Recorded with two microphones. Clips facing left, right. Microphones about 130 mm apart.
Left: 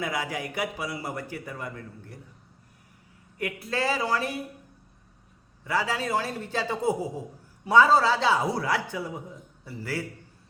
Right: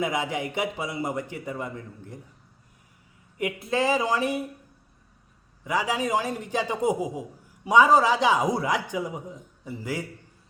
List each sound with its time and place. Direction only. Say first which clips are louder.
0.0 s a man's voice: right 3 dB; 20° right (ahead or behind)
3.3 s a man's voice: right 4 dB; 20° right (ahead or behind)
5.6 s a man's voice: right 2 dB; 15° right (ahead or behind)